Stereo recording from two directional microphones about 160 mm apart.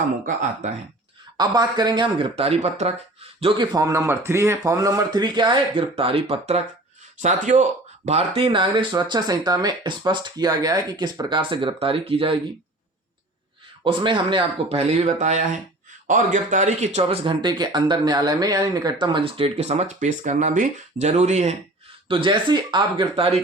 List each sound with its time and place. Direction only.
1.4 s speech: 25° right (ahead or behind)
2.3 s speech: 40° right (ahead or behind)
3.4 s speech: 25° right (ahead or behind)
13.8 s speech: 30° right (ahead or behind)
22.1 s speech: 30° right (ahead or behind)